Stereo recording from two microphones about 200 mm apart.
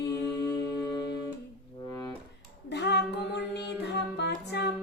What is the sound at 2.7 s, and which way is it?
Female singing, 60° left (ahead or behind).